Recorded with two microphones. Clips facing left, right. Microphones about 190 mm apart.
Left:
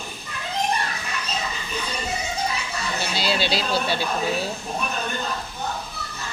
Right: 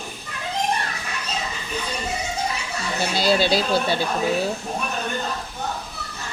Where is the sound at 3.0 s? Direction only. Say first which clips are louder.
Right 6 dB; 50° right (ahead or behind).